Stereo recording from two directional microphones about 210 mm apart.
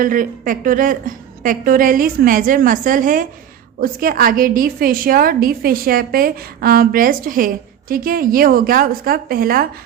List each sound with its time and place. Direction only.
0.0 s a woman's voice: 40° right (ahead or behind)